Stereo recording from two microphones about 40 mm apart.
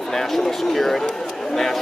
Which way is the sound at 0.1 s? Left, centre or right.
Centre.